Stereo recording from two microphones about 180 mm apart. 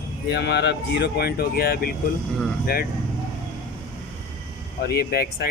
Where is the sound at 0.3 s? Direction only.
70° left (ahead or behind).